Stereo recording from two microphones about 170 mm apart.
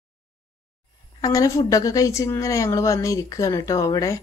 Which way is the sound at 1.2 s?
20° left (ahead or behind).